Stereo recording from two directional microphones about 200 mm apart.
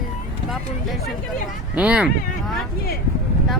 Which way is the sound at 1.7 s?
5° right (ahead or behind).